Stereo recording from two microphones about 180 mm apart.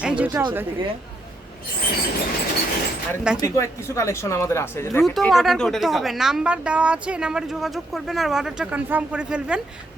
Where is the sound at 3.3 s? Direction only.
15° left (ahead or behind).